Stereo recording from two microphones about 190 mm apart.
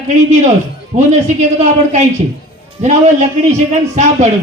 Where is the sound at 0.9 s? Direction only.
35° right (ahead or behind).